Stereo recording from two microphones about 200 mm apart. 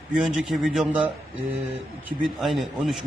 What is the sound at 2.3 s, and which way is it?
Speech, centre (ahead or behind).